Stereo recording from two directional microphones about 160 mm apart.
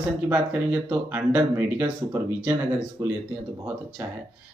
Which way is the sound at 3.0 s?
15° right (ahead or behind).